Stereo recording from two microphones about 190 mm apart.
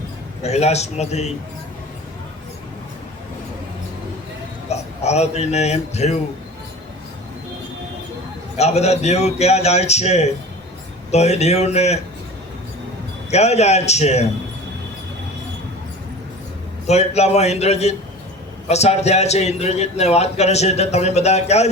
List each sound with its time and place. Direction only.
0.4 s a man's voice: 35° left (ahead or behind)
4.7 s a man's voice: 35° left (ahead or behind)
8.5 s a man's voice: 35° left (ahead or behind)
13.3 s a man's voice: 35° left (ahead or behind)
16.8 s a man's voice: 35° left (ahead or behind)